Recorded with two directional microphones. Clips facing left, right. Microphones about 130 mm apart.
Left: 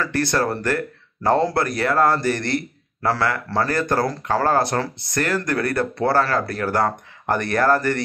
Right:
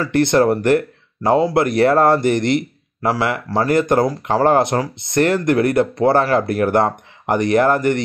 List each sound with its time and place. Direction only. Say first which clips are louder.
0.0 s speech: right 7 dB; 20° right (ahead or behind)